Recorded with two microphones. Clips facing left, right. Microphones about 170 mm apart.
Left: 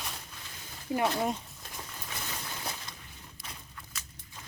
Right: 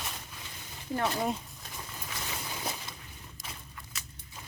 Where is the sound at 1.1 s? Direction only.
Centre (ahead or behind).